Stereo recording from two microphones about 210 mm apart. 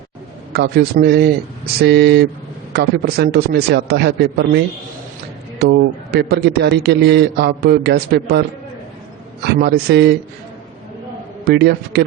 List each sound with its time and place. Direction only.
0.5 s a man's voice: 50° right (ahead or behind)
9.6 s a man's voice: 50° right (ahead or behind)
11.4 s a man's voice: 55° right (ahead or behind)